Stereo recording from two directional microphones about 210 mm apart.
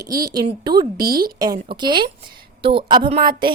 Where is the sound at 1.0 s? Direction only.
45° right (ahead or behind).